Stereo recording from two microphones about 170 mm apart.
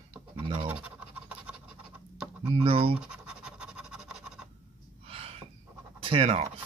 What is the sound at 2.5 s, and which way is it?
Speech, 35° right (ahead or behind).